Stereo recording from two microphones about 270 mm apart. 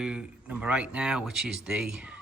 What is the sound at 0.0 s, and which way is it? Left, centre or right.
Speech, centre.